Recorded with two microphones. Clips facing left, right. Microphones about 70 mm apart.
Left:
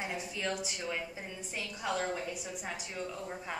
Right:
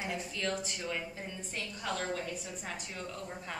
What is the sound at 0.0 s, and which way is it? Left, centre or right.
A woman's voice, centre.